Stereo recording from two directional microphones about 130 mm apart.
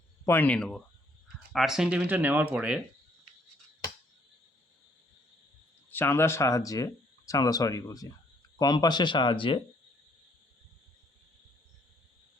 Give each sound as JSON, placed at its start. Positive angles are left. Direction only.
{"t": 0.3, "sound": "speech", "side_deg": 15}
{"t": 5.9, "sound": "speech", "side_deg": 15}